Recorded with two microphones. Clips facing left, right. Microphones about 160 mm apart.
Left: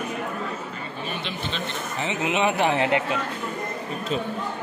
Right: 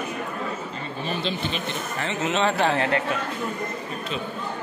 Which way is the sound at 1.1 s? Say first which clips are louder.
Right 6 dB; 30° right (ahead or behind).